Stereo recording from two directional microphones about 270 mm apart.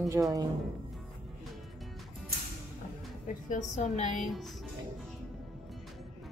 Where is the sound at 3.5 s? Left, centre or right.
Left.